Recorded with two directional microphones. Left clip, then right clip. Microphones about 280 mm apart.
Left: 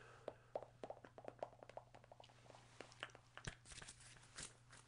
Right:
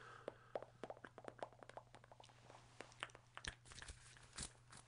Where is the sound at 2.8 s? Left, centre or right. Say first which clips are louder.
Right 2 dB; centre.